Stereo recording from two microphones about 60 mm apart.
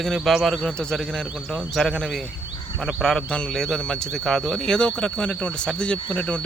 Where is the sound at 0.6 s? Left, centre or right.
Centre.